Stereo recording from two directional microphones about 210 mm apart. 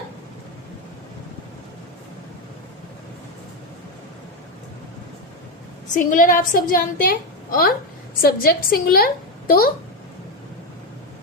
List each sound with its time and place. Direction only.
5.9 s a woman's voice: 40° left (ahead or behind)